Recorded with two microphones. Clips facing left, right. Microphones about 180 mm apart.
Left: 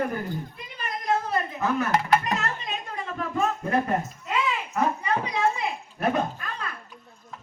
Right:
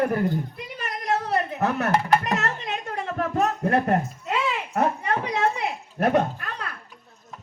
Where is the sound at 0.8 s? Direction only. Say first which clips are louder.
Even; 75° right (ahead or behind).